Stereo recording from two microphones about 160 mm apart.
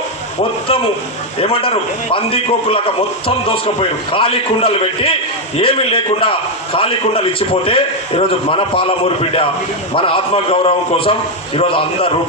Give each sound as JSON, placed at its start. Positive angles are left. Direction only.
{"t": 0.7, "sound": "a man's voice", "side_deg": 40}